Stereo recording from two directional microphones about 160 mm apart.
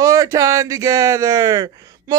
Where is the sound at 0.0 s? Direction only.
20° right (ahead or behind).